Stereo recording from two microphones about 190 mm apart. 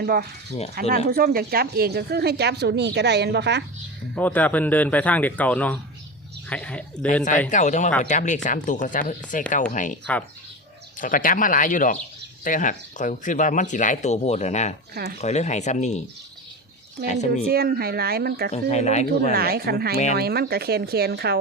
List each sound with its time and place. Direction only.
0.0 s a woman's voice: 55° right (ahead or behind)
4.1 s speech: 10° left (ahead or behind)
7.5 s speech: 40° left (ahead or behind)
11.0 s speech: 45° left (ahead or behind)
17.1 s speech: 40° left (ahead or behind)
17.4 s a woman's voice: 55° right (ahead or behind)
18.5 s speech: 35° left (ahead or behind)
19.3 s a woman's voice: 55° right (ahead or behind)